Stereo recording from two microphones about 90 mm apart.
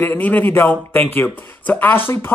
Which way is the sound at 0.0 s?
20° left (ahead or behind).